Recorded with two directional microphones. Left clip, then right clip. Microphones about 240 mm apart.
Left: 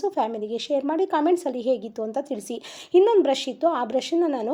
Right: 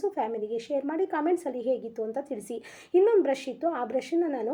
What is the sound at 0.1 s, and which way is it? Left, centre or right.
A woman's voice, centre.